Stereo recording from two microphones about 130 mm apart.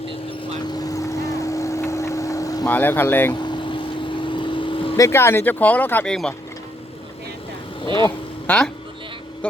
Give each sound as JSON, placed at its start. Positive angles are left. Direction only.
{"t": 0.7, "sound": "vehicle", "side_deg": 30}
{"t": 2.6, "sound": "speech", "side_deg": 15}
{"t": 3.4, "sound": "vehicle", "side_deg": 35}
{"t": 4.9, "sound": "speech", "side_deg": 20}
{"t": 8.4, "sound": "speech", "side_deg": 5}